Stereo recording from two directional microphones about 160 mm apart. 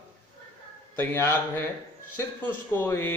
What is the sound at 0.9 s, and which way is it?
A man's voice, 15° left (ahead or behind).